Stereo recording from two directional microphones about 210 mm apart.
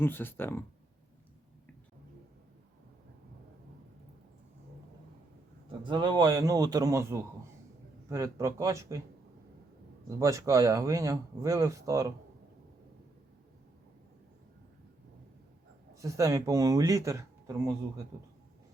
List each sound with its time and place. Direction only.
0.0 s speech: 10° left (ahead or behind)
5.6 s speech: 25° right (ahead or behind)
10.1 s speech: 15° right (ahead or behind)
16.0 s speech: 15° right (ahead or behind)